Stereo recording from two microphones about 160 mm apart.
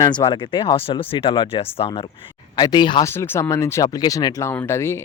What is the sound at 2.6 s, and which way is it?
Speech, 25° left (ahead or behind).